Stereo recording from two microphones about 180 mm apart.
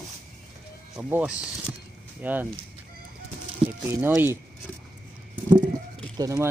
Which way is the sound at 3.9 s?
15° right (ahead or behind).